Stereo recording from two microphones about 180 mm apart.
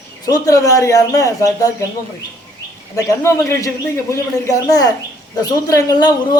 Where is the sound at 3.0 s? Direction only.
15° left (ahead or behind).